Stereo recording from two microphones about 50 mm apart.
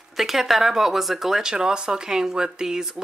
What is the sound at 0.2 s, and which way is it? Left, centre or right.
Speech, centre.